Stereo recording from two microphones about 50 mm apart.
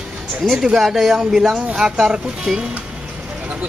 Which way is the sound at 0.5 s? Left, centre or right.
Centre.